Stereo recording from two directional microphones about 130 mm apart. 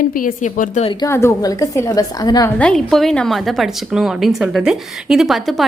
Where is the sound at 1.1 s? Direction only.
20° left (ahead or behind).